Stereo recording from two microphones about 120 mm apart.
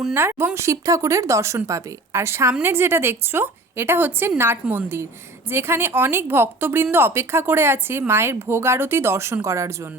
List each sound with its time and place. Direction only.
0.1 s speech: 20° right (ahead or behind)